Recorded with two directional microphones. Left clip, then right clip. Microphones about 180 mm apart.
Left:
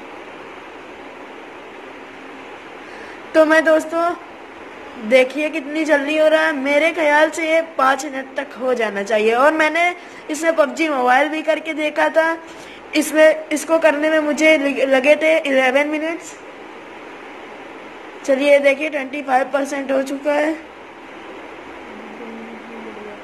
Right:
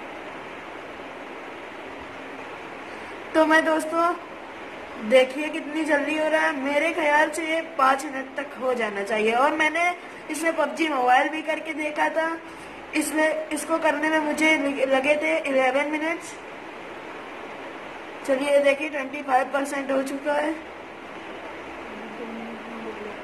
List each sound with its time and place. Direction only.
3.3 s a woman's voice: 25° left (ahead or behind)
5.1 s a woman's voice: 30° left (ahead or behind)
18.4 s a woman's voice: 30° left (ahead or behind)